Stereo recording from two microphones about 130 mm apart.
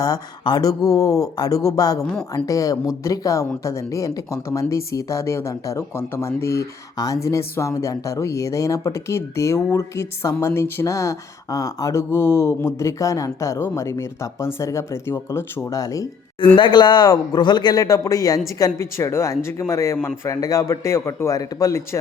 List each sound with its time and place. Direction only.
0.0 s speech: 30° left (ahead or behind)
16.6 s speech: 35° left (ahead or behind)